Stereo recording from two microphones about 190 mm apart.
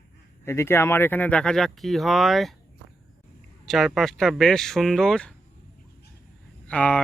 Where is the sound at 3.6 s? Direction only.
Centre (ahead or behind).